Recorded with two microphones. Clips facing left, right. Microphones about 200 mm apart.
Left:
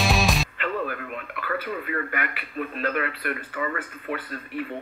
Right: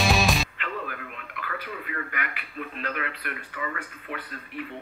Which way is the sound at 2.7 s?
50° left (ahead or behind).